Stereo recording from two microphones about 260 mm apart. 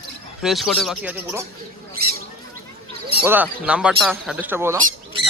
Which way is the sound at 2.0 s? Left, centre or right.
Right.